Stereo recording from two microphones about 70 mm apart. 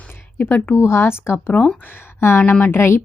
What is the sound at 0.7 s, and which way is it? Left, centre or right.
A woman's voice, left.